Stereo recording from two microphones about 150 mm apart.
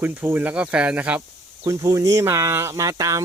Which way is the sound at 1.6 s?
20° right (ahead or behind).